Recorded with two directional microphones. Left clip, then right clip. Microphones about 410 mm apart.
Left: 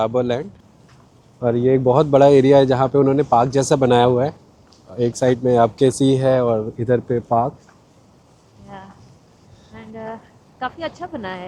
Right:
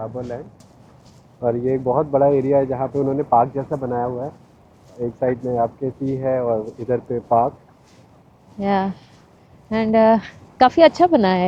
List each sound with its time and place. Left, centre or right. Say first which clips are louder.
0.0 s speech: left 10 dB; left
1.4 s speech: left 3 dB; left
5.0 s speech: left 4 dB; left
8.6 s speech: right 19 dB; right
9.7 s speech: right 18 dB; right
10.6 s speech: right 15 dB; right